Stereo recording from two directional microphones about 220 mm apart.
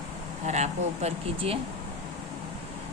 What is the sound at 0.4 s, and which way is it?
A woman's voice, 30° right (ahead or behind).